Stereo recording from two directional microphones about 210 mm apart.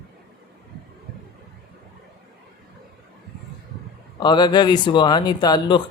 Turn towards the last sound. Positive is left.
turn(degrees=20)  # may be behind; listen again after turning